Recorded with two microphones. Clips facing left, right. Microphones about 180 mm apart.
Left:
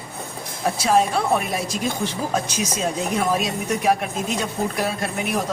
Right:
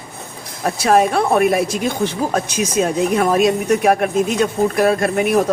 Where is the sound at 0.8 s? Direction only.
60° right (ahead or behind).